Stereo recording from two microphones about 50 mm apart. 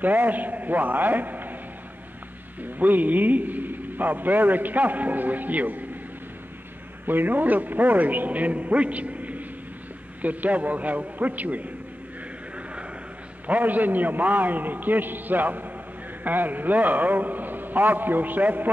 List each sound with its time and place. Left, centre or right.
0.0 s a man's voice: right
2.6 s a man's voice: right
7.1 s a man's voice: right
13.5 s a man's voice: right